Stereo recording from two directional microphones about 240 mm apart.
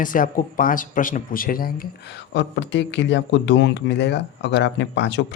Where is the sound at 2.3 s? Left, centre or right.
Left.